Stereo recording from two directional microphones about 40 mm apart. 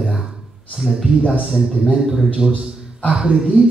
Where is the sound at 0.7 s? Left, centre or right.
Centre.